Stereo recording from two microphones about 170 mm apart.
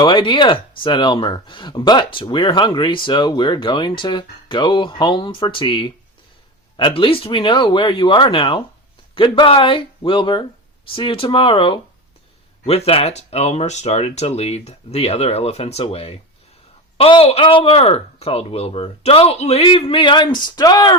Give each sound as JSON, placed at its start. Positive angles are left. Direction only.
{"t": 0.0, "sound": "speech", "side_deg": 30}